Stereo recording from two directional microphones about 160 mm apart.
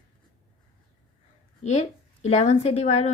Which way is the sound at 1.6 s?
45° left (ahead or behind).